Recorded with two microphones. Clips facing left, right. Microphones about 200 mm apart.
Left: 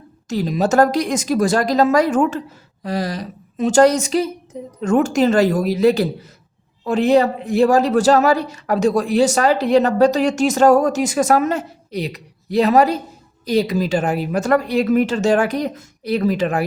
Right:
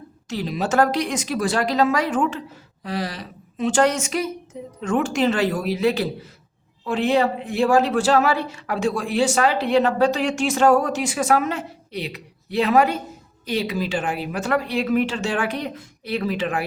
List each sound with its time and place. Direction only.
0.3 s a woman's voice: 45° left (ahead or behind)